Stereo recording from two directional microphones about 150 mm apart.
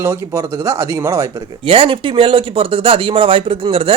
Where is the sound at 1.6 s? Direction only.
40° right (ahead or behind).